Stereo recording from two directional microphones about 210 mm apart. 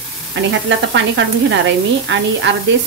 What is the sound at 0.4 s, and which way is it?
Speech, 60° right (ahead or behind).